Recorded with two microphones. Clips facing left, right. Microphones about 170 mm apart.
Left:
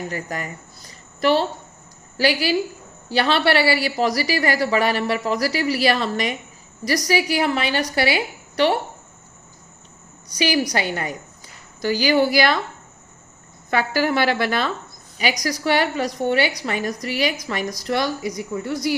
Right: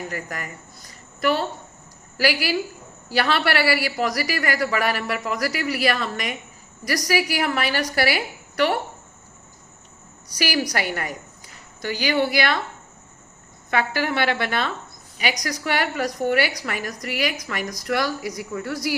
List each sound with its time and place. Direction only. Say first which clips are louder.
0.1 s a woman's voice: left 3 dB; 30° left (ahead or behind)
10.3 s a woman's voice: left 4 dB; 20° left (ahead or behind)
11.8 s a woman's voice: left 4 dB; 35° left (ahead or behind)
13.7 s a woman's voice: left 3 dB; 35° left (ahead or behind)